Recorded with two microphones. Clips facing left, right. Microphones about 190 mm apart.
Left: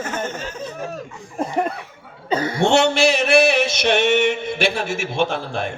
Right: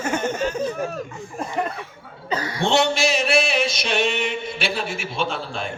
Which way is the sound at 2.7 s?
60° left (ahead or behind).